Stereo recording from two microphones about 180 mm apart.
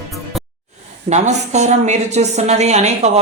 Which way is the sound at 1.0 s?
40° right (ahead or behind).